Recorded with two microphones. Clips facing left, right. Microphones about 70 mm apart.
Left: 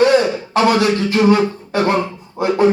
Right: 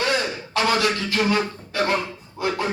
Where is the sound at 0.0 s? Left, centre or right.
Left.